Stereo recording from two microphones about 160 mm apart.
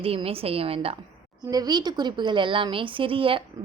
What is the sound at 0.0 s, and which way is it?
Speech, 35° right (ahead or behind).